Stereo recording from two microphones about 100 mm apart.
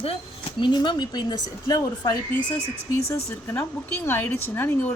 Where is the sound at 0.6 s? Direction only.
50° left (ahead or behind).